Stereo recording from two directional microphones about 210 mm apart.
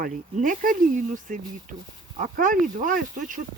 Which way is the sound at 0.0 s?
40° right (ahead or behind).